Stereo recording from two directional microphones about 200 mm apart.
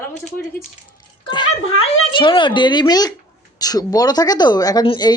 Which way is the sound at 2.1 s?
25° left (ahead or behind).